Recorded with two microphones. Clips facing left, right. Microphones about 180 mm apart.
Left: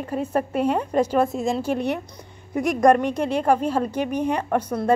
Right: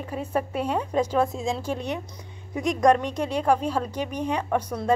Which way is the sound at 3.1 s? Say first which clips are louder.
Left 4 dB; 55° left (ahead or behind).